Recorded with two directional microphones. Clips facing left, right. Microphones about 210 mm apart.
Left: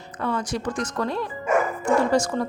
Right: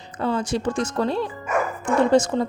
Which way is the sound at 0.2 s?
30° right (ahead or behind).